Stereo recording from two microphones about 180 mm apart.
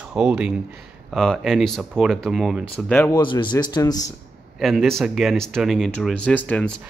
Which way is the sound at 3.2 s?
25° left (ahead or behind).